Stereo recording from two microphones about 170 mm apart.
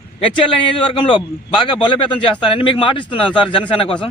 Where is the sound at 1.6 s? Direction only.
30° left (ahead or behind).